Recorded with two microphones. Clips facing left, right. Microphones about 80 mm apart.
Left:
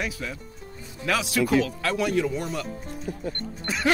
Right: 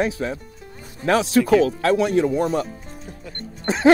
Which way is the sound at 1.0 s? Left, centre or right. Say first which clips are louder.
Right 7 dB; right.